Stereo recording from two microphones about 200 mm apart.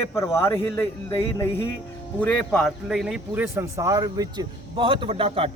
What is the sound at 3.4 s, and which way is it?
A man's voice, 15° right (ahead or behind).